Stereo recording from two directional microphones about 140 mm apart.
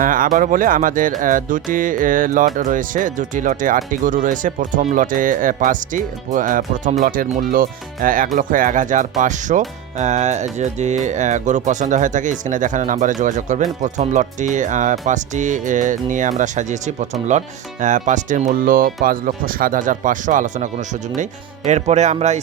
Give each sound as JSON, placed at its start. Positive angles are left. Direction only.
{"t": 0.0, "sound": "music", "side_deg": -75}
{"t": 7.0, "sound": "speech", "side_deg": -85}
{"t": 21.7, "sound": "speech", "side_deg": -55}